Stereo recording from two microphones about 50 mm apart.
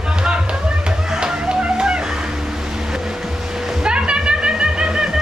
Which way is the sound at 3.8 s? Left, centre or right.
Centre.